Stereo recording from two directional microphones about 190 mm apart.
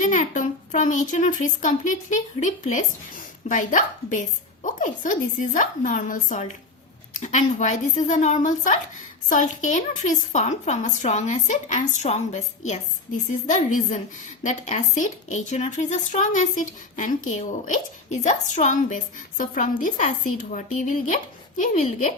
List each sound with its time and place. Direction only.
0.0 s a child's voice: 40° left (ahead or behind)